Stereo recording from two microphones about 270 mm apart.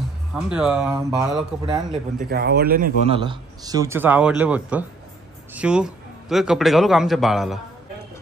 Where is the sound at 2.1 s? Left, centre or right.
Right.